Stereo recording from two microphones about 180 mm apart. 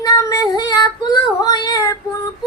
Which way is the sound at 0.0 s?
20° left (ahead or behind).